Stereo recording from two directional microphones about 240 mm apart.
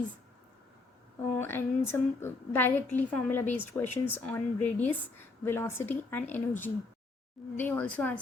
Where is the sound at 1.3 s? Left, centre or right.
Centre.